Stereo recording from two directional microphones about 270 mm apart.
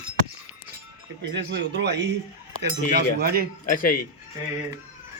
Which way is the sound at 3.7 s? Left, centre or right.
Left.